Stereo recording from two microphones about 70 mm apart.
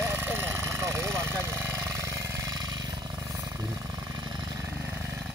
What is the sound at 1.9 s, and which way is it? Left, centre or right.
Jackhammer, right.